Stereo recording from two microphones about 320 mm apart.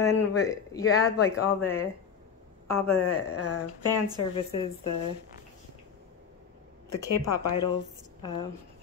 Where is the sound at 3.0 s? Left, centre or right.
Left.